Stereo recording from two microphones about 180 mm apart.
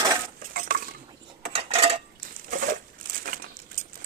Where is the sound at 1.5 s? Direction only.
35° right (ahead or behind).